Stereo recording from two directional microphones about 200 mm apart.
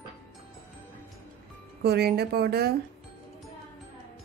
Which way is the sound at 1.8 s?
55° right (ahead or behind).